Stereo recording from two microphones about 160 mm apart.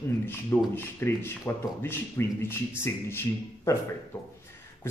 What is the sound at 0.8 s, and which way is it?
Speech, 15° left (ahead or behind).